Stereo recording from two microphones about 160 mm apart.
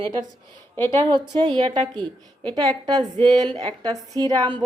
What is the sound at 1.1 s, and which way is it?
Speech, 30° right (ahead or behind).